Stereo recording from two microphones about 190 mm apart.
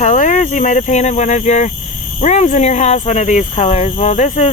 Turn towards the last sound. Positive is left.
turn(degrees=40)  # may be behind; listen again after turning